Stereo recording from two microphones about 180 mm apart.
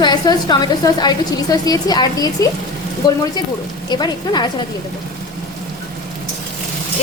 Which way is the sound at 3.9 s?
25° left (ahead or behind).